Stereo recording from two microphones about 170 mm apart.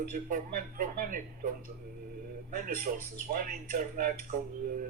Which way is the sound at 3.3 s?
55° right (ahead or behind).